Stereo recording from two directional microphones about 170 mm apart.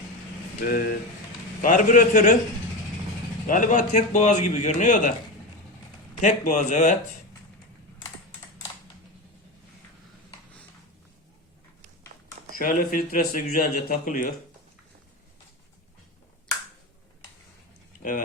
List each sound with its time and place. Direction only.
0.7 s a man's voice: 60° left (ahead or behind)
3.4 s a man's voice: 50° left (ahead or behind)
6.2 s a man's voice: 45° left (ahead or behind)
12.5 s speech: 55° left (ahead or behind)